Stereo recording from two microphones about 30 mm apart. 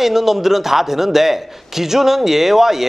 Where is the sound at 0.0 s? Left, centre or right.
Centre.